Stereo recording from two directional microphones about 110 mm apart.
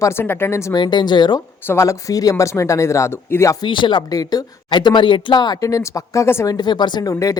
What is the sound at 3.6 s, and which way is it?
Speech, 45° left (ahead or behind).